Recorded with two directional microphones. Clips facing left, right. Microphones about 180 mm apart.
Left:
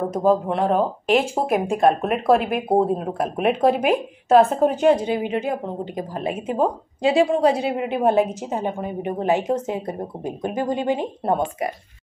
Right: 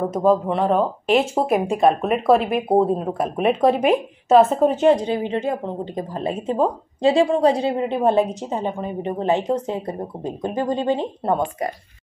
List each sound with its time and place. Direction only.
0.1 s speech: centre (ahead or behind)
5.0 s a woman's voice: 15° left (ahead or behind)